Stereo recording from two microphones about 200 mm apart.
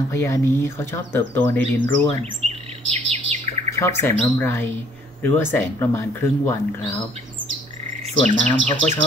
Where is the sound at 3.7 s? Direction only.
10° left (ahead or behind).